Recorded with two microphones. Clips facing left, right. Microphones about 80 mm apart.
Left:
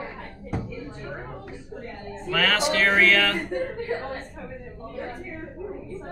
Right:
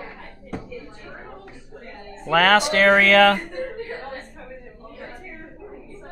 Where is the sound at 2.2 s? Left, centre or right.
Right.